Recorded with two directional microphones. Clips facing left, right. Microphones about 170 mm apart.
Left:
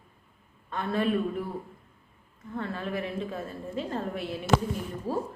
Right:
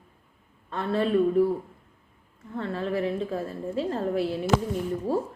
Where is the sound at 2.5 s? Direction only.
30° right (ahead or behind).